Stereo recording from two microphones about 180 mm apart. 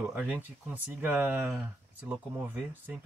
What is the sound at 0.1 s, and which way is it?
Speech, 10° right (ahead or behind).